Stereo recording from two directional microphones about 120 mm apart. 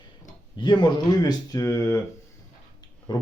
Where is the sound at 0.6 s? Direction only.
40° left (ahead or behind).